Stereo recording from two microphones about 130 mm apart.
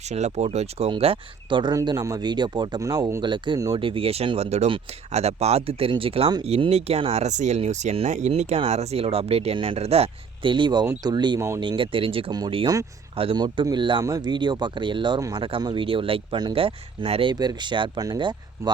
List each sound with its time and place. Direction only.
0.0 s speech: 60° right (ahead or behind); by 11.3 s 35° right (ahead or behind)
11.3 s speech: 20° right (ahead or behind)
11.6 s speech: 40° right (ahead or behind)
12.3 s speech: 30° right (ahead or behind)
17.3 s speech: 30° right (ahead or behind)